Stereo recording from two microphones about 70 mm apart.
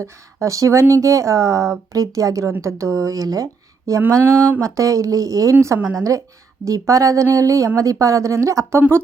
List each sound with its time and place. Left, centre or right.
0.0 s speech: right
4.2 s a sound: right
4.6 s speech: right